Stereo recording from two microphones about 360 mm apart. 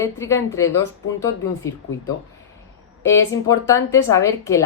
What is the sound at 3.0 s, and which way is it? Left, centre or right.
Speech, centre.